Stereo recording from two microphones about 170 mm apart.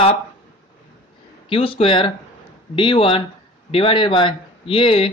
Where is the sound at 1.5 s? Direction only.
30° left (ahead or behind).